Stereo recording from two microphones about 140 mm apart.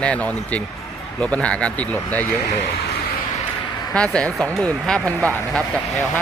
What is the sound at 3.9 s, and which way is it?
Speech, 5° left (ahead or behind).